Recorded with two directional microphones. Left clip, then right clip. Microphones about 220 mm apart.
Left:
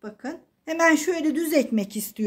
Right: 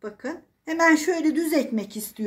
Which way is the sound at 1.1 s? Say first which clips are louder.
Even; 50° left (ahead or behind).